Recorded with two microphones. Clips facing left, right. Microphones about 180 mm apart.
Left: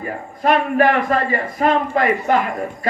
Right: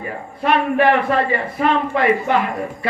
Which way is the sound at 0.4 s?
40° left (ahead or behind).